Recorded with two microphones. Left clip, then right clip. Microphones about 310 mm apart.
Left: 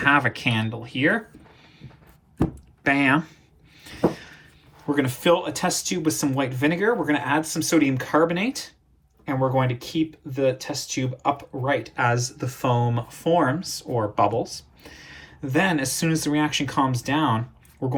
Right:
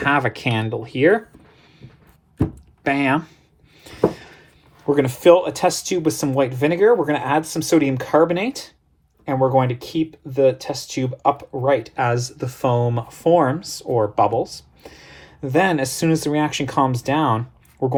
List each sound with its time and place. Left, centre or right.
0.0 s speech: centre
2.8 s speech: centre
3.8 s a sound: right
4.9 s speech: right